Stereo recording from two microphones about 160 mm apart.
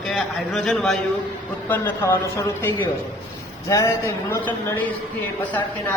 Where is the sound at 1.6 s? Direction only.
15° left (ahead or behind).